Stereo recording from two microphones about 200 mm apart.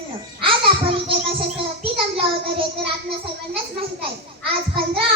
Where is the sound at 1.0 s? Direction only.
25° right (ahead or behind).